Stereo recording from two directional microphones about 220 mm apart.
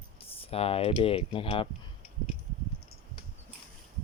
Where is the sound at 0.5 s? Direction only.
25° left (ahead or behind).